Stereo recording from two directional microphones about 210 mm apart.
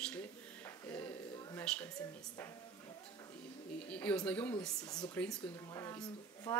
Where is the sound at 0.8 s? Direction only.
10° left (ahead or behind).